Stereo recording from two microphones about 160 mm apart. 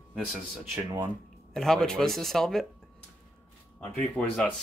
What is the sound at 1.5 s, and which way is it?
Speech, 5° left (ahead or behind).